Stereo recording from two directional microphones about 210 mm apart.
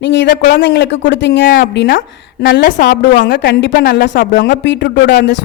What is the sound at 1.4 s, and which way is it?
A woman's voice, 40° left (ahead or behind).